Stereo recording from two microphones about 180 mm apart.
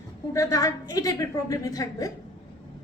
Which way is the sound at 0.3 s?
20° left (ahead or behind).